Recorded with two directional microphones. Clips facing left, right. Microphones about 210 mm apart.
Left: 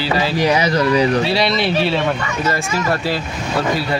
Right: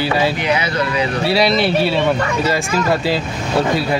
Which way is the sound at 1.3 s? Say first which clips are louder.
Right 2 dB; 5° right (ahead or behind).